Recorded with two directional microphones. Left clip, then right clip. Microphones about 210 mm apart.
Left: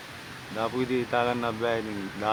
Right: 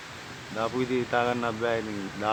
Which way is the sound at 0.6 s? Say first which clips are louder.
Even; 5° left (ahead or behind).